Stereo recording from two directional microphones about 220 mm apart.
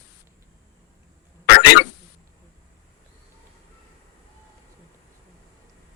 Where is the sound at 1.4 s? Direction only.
45° left (ahead or behind).